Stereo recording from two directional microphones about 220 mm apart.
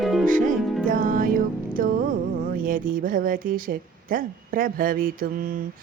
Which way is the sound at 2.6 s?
40° right (ahead or behind).